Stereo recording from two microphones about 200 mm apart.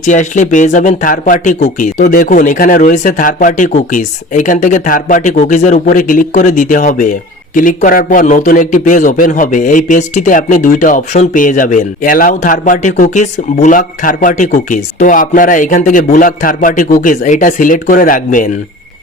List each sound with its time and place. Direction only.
0.1 s speech: 40° left (ahead or behind)